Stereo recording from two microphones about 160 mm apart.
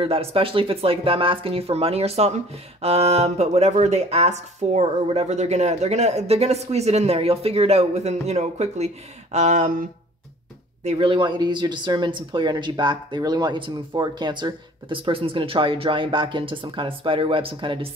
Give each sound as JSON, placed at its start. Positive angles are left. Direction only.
{"t": 0.0, "sound": "speech", "side_deg": -35}
{"t": 10.8, "sound": "speech", "side_deg": -40}